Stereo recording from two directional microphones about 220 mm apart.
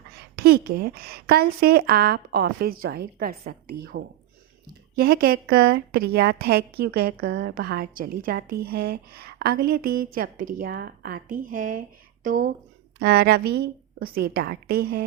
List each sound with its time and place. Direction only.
0.3 s a woman's voice: 45° right (ahead or behind)